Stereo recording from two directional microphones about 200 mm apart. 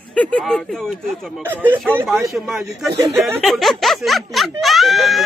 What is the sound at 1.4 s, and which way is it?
Speech, 10° right (ahead or behind).